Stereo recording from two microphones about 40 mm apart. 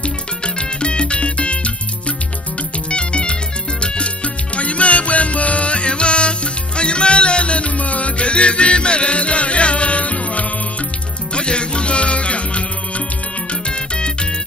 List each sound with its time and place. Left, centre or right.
0.6 s music: left
13.7 s music: left